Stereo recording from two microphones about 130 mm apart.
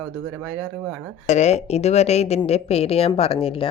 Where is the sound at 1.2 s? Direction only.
60° left (ahead or behind).